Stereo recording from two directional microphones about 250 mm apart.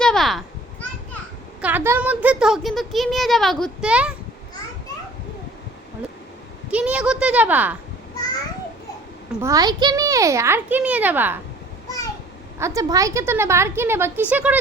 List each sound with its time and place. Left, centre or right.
0.0 s children playing: centre
1.6 s speech: centre
6.7 s speech: centre
9.4 s a woman's voice: centre
12.5 s a woman's voice: centre